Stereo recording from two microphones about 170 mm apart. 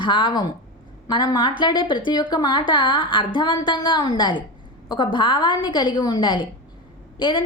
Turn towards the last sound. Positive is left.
turn(degrees=30)  # may be behind; listen again after turning